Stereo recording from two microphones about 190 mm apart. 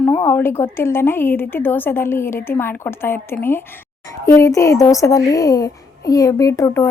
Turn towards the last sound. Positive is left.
turn(degrees=15)  # may be behind; listen again after turning